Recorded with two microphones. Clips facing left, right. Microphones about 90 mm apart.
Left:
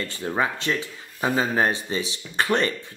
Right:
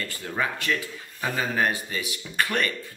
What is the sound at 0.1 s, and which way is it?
Speech, 30° left (ahead or behind).